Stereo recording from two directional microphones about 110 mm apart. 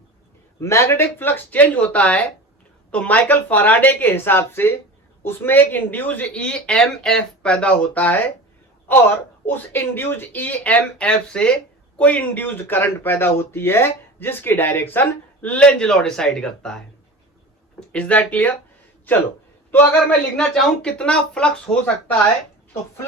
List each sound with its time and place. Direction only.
0.6 s speech: 25° left (ahead or behind)
19.7 s speech: 15° left (ahead or behind)